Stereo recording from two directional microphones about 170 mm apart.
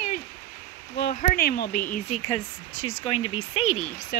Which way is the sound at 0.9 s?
60° left (ahead or behind).